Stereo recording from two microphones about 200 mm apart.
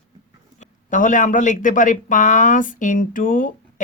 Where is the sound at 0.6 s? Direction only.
40° left (ahead or behind).